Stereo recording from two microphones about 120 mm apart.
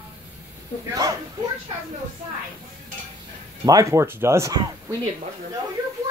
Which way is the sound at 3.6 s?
30° right (ahead or behind).